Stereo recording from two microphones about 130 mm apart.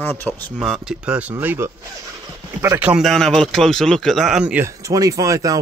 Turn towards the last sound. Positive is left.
turn(degrees=-25)  # may be behind; listen again after turning